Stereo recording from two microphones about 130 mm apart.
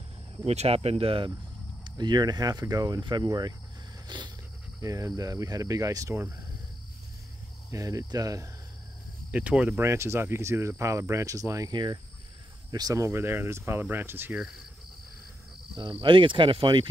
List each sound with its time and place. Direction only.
0.5 s speech: 50° right (ahead or behind)
1.9 s speech: 35° right (ahead or behind)
7.7 s speech: 25° right (ahead or behind)
9.3 s speech: 10° right (ahead or behind)
15.7 s speech: 40° right (ahead or behind)